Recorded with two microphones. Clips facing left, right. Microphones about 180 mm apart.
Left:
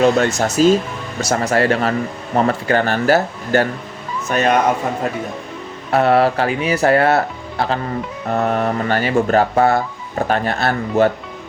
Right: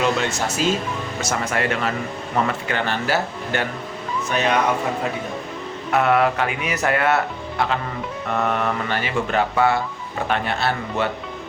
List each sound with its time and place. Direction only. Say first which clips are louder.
0.0 s speech: left 7 dB; 40° left (ahead or behind)
5.9 s speech: left 4 dB; 35° left (ahead or behind)
8.3 s speech: left 4 dB; 40° left (ahead or behind)